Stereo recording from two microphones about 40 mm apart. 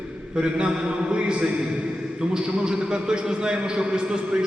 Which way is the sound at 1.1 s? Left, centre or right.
Right.